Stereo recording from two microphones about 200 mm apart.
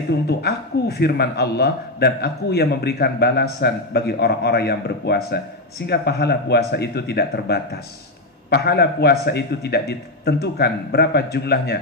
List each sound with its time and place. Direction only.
0.3 s a man's voice: 55° left (ahead or behind)